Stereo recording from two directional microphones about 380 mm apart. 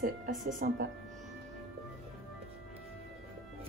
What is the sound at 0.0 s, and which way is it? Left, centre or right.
Music, centre.